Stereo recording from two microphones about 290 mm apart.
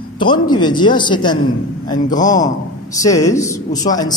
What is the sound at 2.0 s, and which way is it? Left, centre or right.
Speech, left.